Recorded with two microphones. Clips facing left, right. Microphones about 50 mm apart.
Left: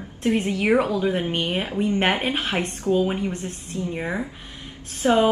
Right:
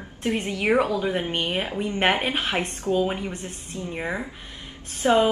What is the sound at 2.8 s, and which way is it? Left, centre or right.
Speech, right.